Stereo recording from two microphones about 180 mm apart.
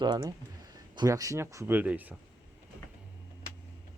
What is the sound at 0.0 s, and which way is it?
Speech, 25° right (ahead or behind).